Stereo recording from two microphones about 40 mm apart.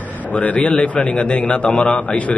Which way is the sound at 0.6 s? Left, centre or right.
Centre.